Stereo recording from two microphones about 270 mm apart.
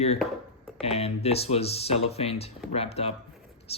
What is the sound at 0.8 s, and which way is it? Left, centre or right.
Speech, left.